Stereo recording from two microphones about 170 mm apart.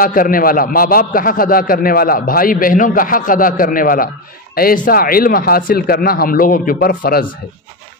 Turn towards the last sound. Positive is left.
turn(degrees=60)  # may be behind; listen again after turning